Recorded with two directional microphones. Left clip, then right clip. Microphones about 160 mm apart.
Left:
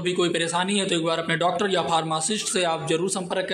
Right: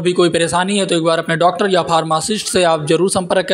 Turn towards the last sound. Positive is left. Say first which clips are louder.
# right 11 dB
turn(degrees=-40)  # may be behind; listen again after turning